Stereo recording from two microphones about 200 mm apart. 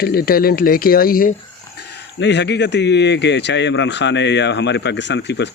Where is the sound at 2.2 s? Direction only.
60° left (ahead or behind).